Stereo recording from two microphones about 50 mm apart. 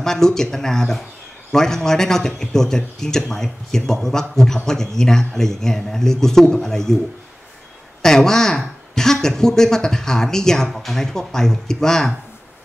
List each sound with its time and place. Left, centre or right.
0.0 s speech: centre
8.0 s speech: centre